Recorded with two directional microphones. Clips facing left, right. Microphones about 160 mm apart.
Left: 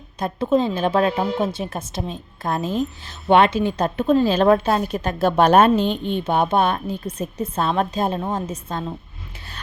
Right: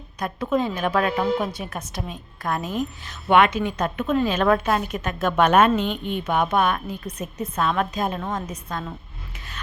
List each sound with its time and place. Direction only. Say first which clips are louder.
0.2 s a woman's voice: left 4 dB; 25° left (ahead or behind)